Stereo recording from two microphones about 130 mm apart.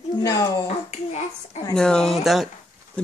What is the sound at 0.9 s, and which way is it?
Speech, 60° left (ahead or behind).